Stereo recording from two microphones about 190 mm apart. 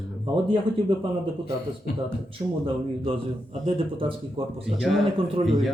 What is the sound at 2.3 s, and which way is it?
Speech, 30° right (ahead or behind).